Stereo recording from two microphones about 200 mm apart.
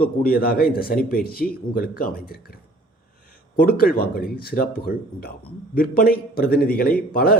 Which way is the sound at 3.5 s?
45° left (ahead or behind).